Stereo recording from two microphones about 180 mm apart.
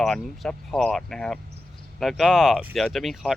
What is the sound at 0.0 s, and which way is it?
Speech, 5° left (ahead or behind).